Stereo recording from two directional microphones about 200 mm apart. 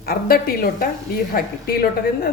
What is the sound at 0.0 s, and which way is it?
A woman's voice, 50° left (ahead or behind).